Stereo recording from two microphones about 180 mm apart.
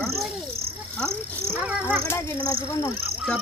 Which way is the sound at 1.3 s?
10° right (ahead or behind).